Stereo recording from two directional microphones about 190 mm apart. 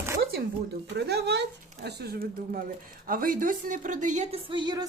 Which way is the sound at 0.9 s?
60° right (ahead or behind).